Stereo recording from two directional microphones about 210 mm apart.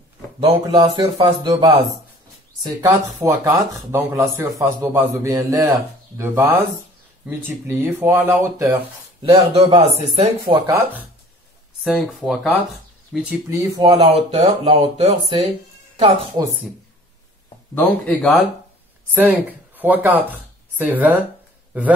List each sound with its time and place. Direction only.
0.4 s a man's voice: 25° right (ahead or behind)
9.2 s speech: 25° right (ahead or behind); by 11.1 s 10° right (ahead or behind)
11.8 s a man's voice: centre (ahead or behind); by 15.0 s 30° right (ahead or behind)
17.7 s speech: 5° left (ahead or behind)
19.1 s a man's voice: 10° right (ahead or behind)